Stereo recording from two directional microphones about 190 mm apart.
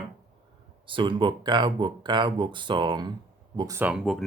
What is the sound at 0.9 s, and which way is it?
Speech, 25° right (ahead or behind).